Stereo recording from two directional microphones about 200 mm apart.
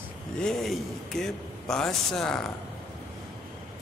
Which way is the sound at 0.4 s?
Centre (ahead or behind).